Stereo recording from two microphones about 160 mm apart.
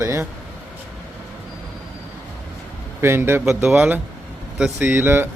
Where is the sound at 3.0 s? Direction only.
15° right (ahead or behind).